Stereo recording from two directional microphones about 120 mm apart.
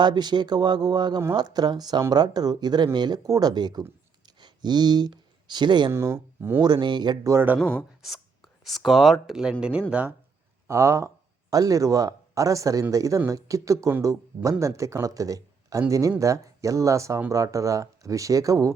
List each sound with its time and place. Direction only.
0.0 s speech: 35° right (ahead or behind)
4.3 s a sound: 35° right (ahead or behind)
5.9 s speech: 20° right (ahead or behind)
6.6 s speech: 35° right (ahead or behind)
7.3 s speech: 15° right (ahead or behind)
7.6 s speech: 10° left (ahead or behind)
8.6 s speech: centre (ahead or behind)
10.7 s speech: 25° right (ahead or behind)